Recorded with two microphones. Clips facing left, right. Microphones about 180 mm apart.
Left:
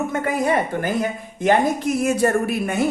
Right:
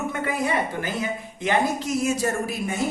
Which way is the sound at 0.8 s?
55° left (ahead or behind).